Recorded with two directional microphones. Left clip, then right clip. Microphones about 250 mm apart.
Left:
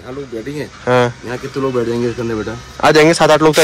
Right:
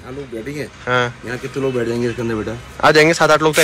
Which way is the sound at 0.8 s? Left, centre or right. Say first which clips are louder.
Left 5 dB; centre.